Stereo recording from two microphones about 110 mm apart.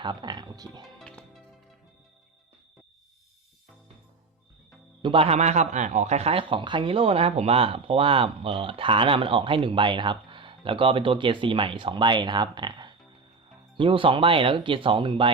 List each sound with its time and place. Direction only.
0.0 s speech: 45° right (ahead or behind)
0.9 s music: 5° left (ahead or behind)
5.0 s a man's voice: 55° right (ahead or behind)